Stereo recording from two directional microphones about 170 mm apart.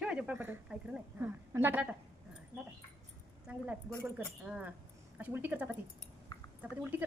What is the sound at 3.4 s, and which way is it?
A woman's voice, 10° right (ahead or behind).